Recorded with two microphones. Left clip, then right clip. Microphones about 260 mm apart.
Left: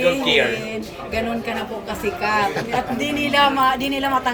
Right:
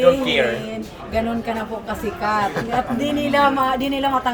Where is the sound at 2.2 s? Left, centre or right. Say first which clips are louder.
Even; right.